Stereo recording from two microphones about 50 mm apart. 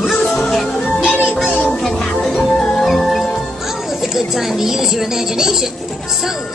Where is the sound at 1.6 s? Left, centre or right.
Centre.